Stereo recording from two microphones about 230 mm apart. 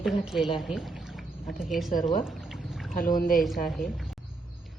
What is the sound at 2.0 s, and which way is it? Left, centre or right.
Pour, centre.